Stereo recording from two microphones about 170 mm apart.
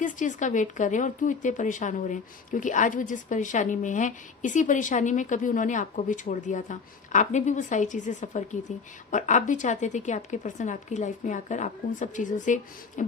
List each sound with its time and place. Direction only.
0.0 s a woman's voice: 50° left (ahead or behind)